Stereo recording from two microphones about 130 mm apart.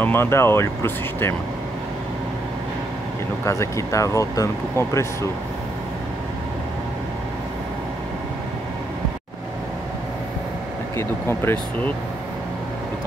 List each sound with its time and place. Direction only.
0.0 s speech: 20° left (ahead or behind)
3.4 s speech: 25° left (ahead or behind)
11.0 s speech: 20° left (ahead or behind)